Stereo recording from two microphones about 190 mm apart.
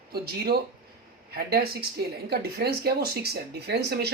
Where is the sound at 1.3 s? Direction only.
55° right (ahead or behind).